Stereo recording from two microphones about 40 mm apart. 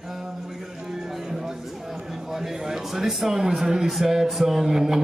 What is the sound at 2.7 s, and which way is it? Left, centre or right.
Speech, centre.